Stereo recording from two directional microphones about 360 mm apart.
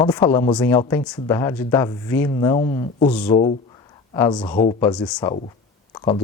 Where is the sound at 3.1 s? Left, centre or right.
Centre.